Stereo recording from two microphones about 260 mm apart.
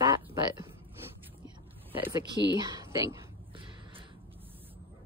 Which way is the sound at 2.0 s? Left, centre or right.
Centre.